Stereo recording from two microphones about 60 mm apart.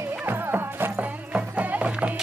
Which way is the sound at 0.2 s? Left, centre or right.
Right.